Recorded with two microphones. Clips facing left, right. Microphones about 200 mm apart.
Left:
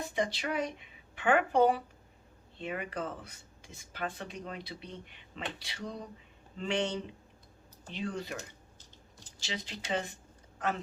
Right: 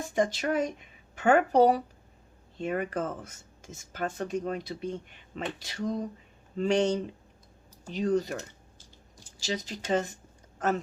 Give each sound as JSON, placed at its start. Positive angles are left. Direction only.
{"t": 0.1, "sound": "speech", "side_deg": -45}
{"t": 9.4, "sound": "speech", "side_deg": -40}